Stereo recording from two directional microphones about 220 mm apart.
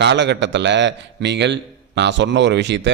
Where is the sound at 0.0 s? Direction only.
50° right (ahead or behind).